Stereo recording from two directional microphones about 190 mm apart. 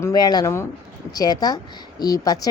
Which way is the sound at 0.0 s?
20° left (ahead or behind).